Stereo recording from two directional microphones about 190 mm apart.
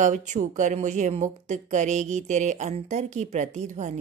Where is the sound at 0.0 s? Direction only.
40° right (ahead or behind).